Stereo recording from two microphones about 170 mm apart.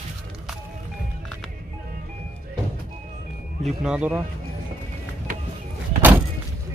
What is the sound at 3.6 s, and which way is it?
Speech, 5° right (ahead or behind).